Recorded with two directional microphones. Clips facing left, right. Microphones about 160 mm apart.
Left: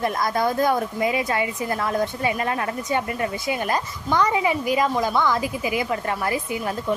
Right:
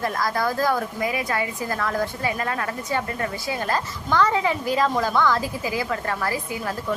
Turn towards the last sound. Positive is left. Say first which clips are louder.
# left 2 dB
turn(degrees=20)  # may be behind; listen again after turning